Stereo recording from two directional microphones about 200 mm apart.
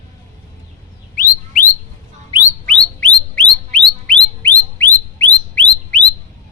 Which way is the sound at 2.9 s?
5° left (ahead or behind).